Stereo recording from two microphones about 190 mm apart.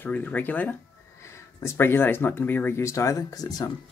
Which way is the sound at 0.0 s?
10° left (ahead or behind).